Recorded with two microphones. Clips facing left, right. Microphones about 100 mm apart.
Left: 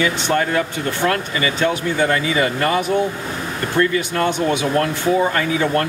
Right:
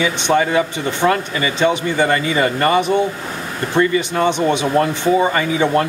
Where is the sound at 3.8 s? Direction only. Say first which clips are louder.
Right 2 dB; 5° right (ahead or behind).